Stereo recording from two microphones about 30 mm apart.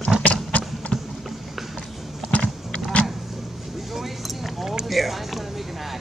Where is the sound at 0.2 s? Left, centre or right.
Left.